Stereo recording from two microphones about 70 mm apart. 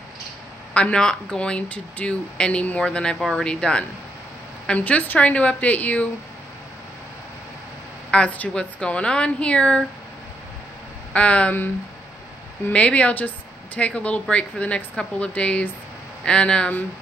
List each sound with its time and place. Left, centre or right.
0.7 s speech: centre
4.6 s a woman's voice: left
8.1 s speech: centre
11.1 s speech: centre
12.7 s a woman's voice: centre